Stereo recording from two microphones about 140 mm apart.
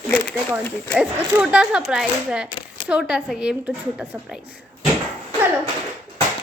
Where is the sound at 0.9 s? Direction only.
10° right (ahead or behind).